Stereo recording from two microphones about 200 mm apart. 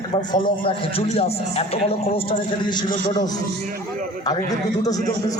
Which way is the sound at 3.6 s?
40° right (ahead or behind).